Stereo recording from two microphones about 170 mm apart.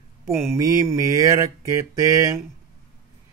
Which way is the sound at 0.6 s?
20° right (ahead or behind).